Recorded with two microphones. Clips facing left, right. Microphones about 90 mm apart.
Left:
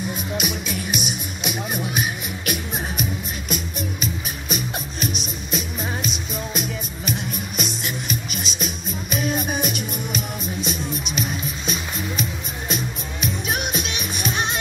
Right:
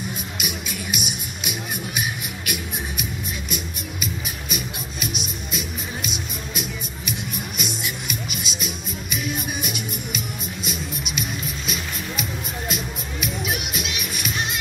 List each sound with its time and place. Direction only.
0.4 s music: 40° left (ahead or behind)